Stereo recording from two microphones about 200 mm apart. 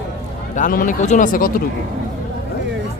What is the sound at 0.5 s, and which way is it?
A man's voice, 45° left (ahead or behind).